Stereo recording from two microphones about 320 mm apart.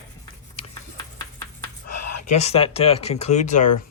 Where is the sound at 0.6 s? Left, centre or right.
Centre.